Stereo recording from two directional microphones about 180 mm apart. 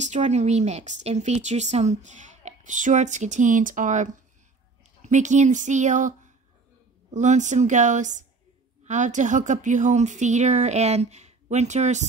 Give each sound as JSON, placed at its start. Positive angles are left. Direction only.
{"t": 0.0, "sound": "a woman's voice", "side_deg": -40}